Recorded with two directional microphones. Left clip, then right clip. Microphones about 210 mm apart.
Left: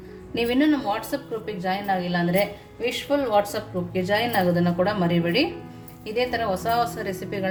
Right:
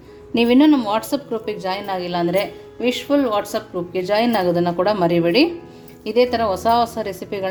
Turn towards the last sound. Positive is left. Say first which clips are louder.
# right 4 dB
turn(degrees=-30)  # may be behind; listen again after turning